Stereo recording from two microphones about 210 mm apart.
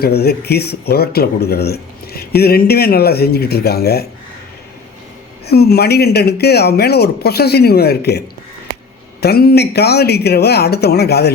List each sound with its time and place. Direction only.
0.0 s speech: 50° left (ahead or behind)
5.5 s speech: 50° left (ahead or behind)
9.2 s speech: 50° left (ahead or behind)